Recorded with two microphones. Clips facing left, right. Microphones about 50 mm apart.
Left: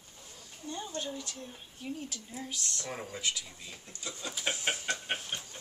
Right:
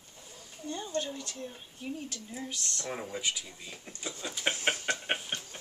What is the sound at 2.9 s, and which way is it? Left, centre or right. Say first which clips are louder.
Speech: right 2 dB; centre.